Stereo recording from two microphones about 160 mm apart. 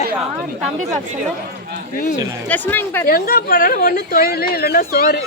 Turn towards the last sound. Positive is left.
turn(degrees=75)  # may be behind; listen again after turning